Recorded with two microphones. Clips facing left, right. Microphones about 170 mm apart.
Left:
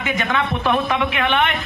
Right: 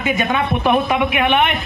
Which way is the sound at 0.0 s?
25° right (ahead or behind).